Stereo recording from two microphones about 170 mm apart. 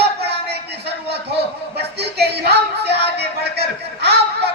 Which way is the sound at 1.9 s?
75° right (ahead or behind).